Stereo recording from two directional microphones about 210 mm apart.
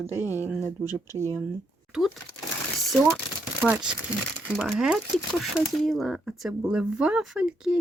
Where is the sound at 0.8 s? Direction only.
15° left (ahead or behind).